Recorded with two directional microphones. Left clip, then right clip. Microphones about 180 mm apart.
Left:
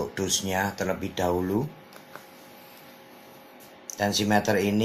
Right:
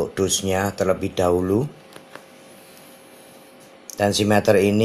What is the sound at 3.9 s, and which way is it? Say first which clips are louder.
Speech: right 5 dB; 50° right (ahead or behind).